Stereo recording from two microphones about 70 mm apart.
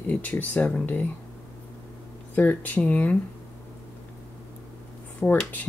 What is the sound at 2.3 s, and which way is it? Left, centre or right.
Speech, left.